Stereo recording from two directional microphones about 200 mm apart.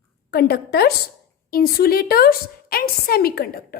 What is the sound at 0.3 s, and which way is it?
A woman's voice, 50° left (ahead or behind).